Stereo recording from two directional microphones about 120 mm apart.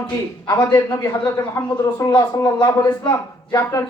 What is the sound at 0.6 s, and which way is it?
Speech, 30° left (ahead or behind).